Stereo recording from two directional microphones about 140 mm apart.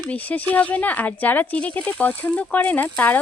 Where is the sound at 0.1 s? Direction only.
10° left (ahead or behind).